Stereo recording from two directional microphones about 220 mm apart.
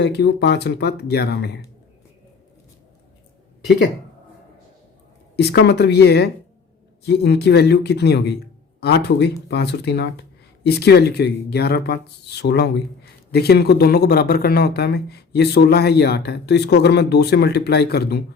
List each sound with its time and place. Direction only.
0.1 s speech: 50° left (ahead or behind)
5.4 s speech: 50° left (ahead or behind)